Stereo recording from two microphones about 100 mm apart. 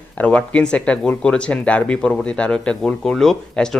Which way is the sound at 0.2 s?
15° left (ahead or behind).